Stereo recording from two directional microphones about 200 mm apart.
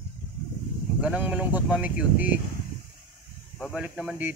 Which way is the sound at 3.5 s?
5° left (ahead or behind).